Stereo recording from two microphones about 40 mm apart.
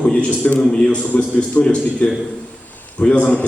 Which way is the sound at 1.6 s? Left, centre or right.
Left.